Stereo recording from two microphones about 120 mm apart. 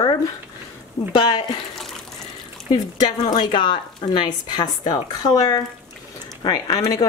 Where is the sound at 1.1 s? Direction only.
40° left (ahead or behind).